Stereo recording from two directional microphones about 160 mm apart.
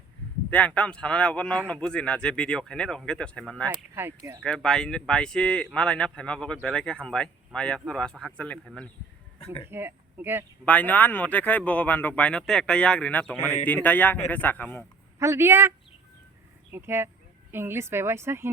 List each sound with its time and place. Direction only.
0.5 s a man's voice: 10° left (ahead or behind)
3.9 s a woman's voice: 15° right (ahead or behind)
4.4 s speech: 5° left (ahead or behind)
9.6 s speech: 15° right (ahead or behind)
10.7 s a man's voice: 10° left (ahead or behind)
15.2 s a woman's voice: 15° right (ahead or behind)
16.7 s a woman's voice: 15° right (ahead or behind)